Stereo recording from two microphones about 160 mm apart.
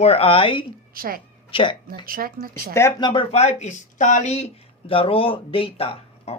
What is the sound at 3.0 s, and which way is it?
Speech, 30° left (ahead or behind).